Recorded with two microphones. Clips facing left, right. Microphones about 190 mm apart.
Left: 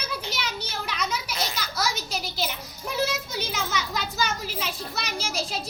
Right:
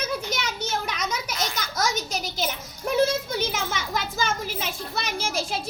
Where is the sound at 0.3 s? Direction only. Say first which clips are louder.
Right 4 dB; 45° right (ahead or behind).